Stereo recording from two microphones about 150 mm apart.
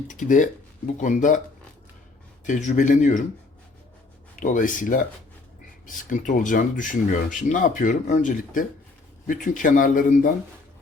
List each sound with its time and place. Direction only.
0.1 s speech: 60° left (ahead or behind)
2.4 s speech: 55° left (ahead or behind)
4.4 s speech: 60° left (ahead or behind)